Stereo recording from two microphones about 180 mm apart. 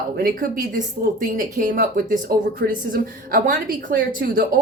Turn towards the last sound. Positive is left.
turn(degrees=-50)  # may be behind; listen again after turning